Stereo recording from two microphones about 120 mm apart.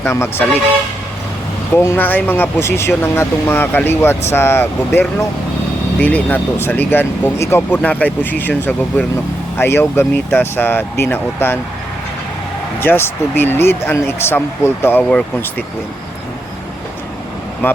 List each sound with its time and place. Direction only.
0.0 s speech: 20° left (ahead or behind)
1.7 s speech: 20° left (ahead or behind)
7.8 s speech: 10° left (ahead or behind)
12.8 s speech: 20° left (ahead or behind)